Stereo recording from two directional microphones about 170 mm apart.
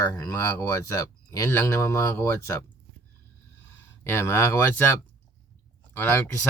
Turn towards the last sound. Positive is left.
turn(degrees=15)  # may be behind; listen again after turning